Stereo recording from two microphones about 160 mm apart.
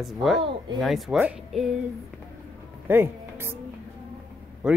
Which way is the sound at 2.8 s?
15° right (ahead or behind).